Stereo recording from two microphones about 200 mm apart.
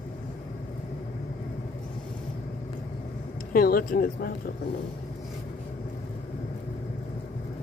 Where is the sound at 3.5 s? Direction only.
45° left (ahead or behind).